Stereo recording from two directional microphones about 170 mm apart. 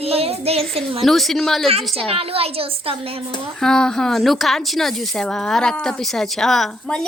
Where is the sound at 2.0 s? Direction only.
35° right (ahead or behind).